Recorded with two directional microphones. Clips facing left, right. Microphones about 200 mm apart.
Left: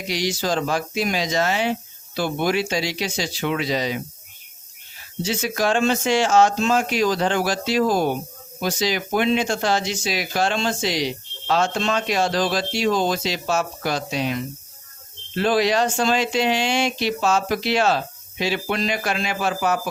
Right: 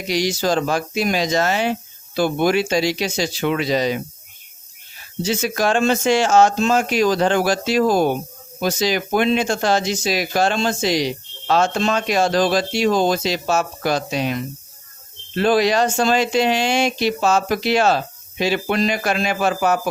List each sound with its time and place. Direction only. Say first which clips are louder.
0.1 s speech: right 4 dB; 45° right (ahead or behind)
5.4 s speech: right 1 dB; 50° right (ahead or behind)
15.4 s speech: right 3 dB; 45° right (ahead or behind)